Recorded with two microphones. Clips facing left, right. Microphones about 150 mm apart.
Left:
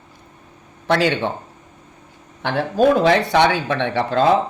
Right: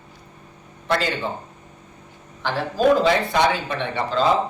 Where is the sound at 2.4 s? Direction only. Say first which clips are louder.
Left 3 dB; 60° left (ahead or behind).